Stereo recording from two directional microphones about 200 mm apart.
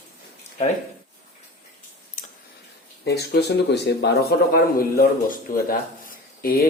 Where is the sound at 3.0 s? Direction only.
55° left (ahead or behind).